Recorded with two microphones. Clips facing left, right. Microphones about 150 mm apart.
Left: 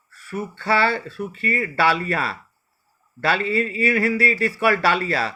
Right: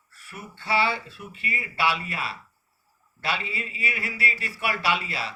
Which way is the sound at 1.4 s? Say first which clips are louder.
Left 6 dB; 5° right (ahead or behind).